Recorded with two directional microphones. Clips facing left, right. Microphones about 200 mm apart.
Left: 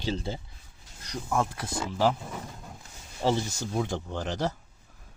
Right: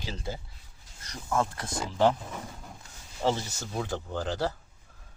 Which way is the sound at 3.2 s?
15° left (ahead or behind).